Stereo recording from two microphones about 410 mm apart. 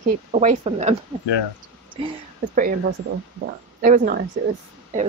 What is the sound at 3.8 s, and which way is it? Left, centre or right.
Speech, centre.